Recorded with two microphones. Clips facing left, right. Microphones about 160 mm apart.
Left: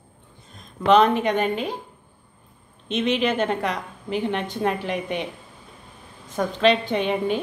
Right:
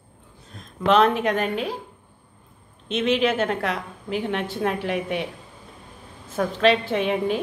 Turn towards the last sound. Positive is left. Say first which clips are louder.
# even
turn(degrees=0)  # may be behind; listen again after turning